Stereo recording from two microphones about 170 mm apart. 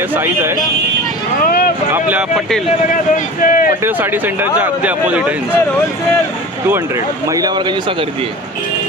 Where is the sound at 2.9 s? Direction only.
50° left (ahead or behind).